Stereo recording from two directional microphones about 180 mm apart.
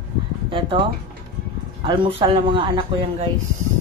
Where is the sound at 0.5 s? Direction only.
30° right (ahead or behind).